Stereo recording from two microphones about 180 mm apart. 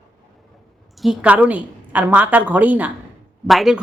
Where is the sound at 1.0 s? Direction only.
5° right (ahead or behind).